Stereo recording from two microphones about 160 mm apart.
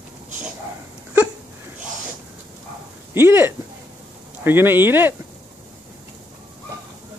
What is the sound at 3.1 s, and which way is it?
Speech, 15° right (ahead or behind).